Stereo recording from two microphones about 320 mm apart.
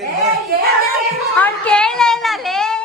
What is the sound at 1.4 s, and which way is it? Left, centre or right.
A woman's voice, centre.